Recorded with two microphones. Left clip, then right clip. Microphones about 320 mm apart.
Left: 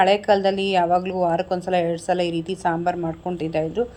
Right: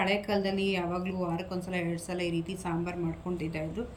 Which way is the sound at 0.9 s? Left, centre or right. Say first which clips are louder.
Left 14 dB; left.